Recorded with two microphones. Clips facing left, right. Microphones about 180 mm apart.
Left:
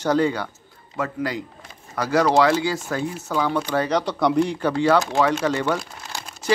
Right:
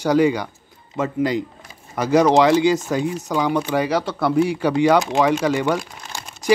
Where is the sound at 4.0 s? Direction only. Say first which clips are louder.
Right 1 dB; centre (ahead or behind).